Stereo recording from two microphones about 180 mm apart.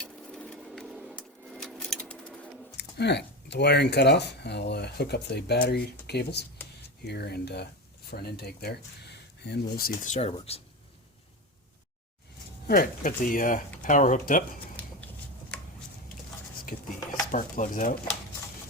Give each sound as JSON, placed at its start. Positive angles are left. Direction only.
{"t": 0.0, "sound": "a sound", "side_deg": 5}
{"t": 2.7, "sound": "speech", "side_deg": 70}
{"t": 12.6, "sound": "speech", "side_deg": 55}
{"t": 17.3, "sound": "speech", "side_deg": 45}